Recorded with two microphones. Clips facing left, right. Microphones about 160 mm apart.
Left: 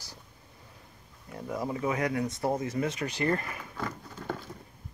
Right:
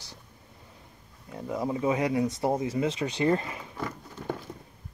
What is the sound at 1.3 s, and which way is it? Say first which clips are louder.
Speech: right 3 dB; 20° right (ahead or behind).